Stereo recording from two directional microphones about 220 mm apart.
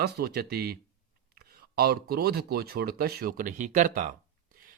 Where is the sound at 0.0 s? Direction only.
45° right (ahead or behind).